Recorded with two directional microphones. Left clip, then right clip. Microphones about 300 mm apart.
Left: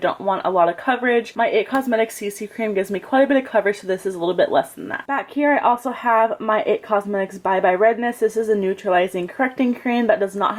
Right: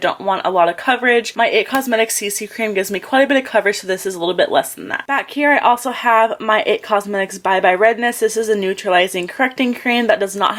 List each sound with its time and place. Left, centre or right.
0.0 s speech: centre